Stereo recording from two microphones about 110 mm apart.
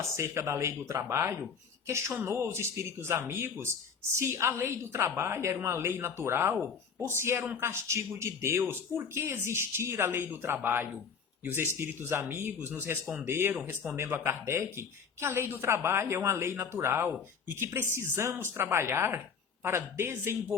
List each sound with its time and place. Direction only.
0.0 s speech: 25° right (ahead or behind)